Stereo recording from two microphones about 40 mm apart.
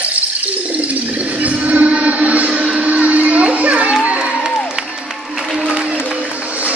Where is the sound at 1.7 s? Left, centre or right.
Right.